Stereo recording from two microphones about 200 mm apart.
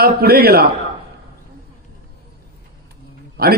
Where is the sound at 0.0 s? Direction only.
50° right (ahead or behind).